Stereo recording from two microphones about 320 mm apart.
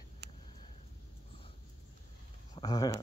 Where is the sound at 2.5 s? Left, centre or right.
Centre.